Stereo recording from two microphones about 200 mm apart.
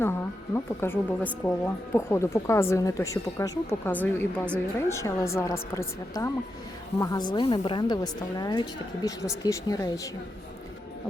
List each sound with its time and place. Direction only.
0.0 s a woman's voice: 10° left (ahead or behind)